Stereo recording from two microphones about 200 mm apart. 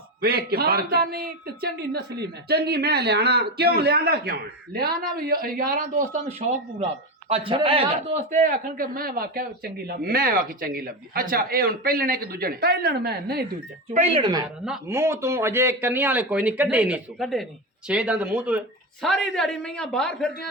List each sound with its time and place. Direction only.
0.2 s a man's voice: 50° right (ahead or behind)
13.9 s a man's voice: 30° right (ahead or behind); by 20.5 s 5° left (ahead or behind)